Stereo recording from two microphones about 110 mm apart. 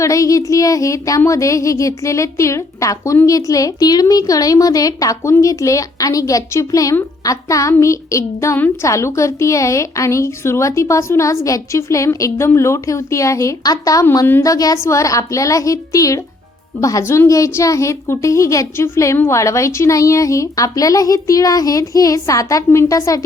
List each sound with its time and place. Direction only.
0.0 s a woman's voice: 30° left (ahead or behind)